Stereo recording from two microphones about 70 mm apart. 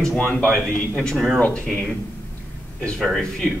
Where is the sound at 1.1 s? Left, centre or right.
Centre.